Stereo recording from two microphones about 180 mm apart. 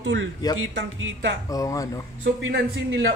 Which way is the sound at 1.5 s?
20° left (ahead or behind).